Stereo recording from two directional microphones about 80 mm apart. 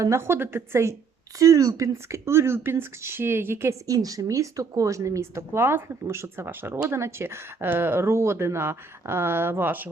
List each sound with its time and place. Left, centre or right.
0.0 s speech: right
1.4 s speech: right
3.8 s speech: right